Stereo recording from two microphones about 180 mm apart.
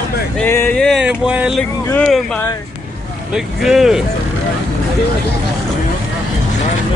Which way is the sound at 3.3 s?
Centre (ahead or behind).